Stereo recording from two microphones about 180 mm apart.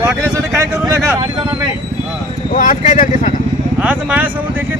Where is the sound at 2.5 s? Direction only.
40° left (ahead or behind).